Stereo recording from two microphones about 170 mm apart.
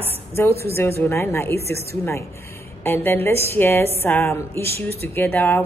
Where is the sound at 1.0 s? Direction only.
15° left (ahead or behind).